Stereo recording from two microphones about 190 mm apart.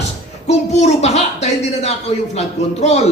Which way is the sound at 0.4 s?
35° left (ahead or behind).